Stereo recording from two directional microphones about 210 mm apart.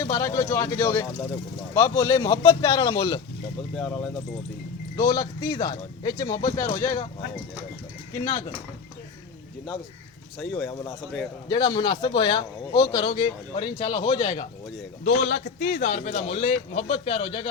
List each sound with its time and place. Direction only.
0.0 s speech: 15° left (ahead or behind)
4.9 s speech: 15° left (ahead or behind)
8.2 s a man's voice: 20° left (ahead or behind)
10.4 s speech: 5° left (ahead or behind)
11.4 s a man's voice: 20° left (ahead or behind)
15.3 s a man's voice: 45° left (ahead or behind); by 17.4 s 25° left (ahead or behind)